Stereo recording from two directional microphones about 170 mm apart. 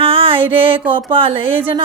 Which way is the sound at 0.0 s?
30° right (ahead or behind).